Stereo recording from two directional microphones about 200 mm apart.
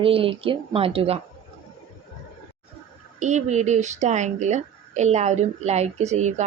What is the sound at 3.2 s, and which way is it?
Speech, 35° right (ahead or behind).